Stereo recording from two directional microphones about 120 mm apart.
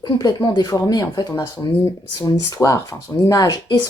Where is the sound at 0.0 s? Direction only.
35° left (ahead or behind).